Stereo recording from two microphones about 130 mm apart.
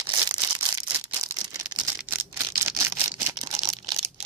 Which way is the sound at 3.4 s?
25° right (ahead or behind).